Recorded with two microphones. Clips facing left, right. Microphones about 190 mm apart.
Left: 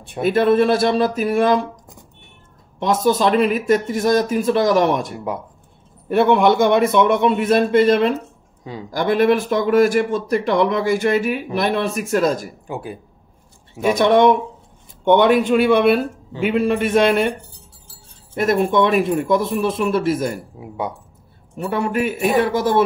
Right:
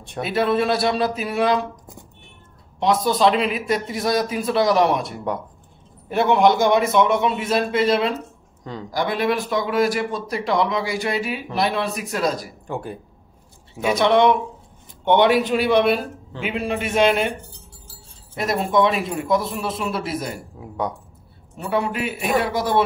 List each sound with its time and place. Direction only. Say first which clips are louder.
0.2 s speech: left 5 dB; 50° left (ahead or behind)
2.8 s speech: left 1 dB; 45° left (ahead or behind)
6.0 s a man's voice: left 2 dB; 55° left (ahead or behind)
12.6 s speech: right 2 dB; 5° left (ahead or behind)
13.8 s speech: left 3 dB; 45° left (ahead or behind)
18.3 s speech: left 4 dB; 50° left (ahead or behind)
20.6 s speech: even; 5° left (ahead or behind)
21.8 s speech: left 5 dB; 45° left (ahead or behind)